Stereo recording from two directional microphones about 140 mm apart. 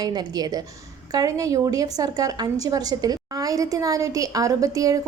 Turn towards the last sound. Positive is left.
turn(degrees=-25)  # may be behind; listen again after turning